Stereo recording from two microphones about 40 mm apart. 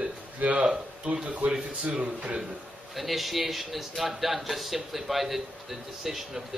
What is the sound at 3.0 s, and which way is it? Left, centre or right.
A man's voice, centre.